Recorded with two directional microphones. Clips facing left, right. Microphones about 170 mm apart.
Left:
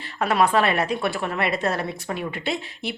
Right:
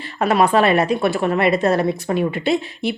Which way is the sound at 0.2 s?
20° right (ahead or behind).